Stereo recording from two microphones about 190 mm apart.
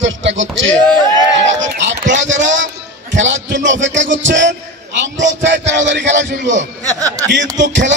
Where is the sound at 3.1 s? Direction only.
75° right (ahead or behind).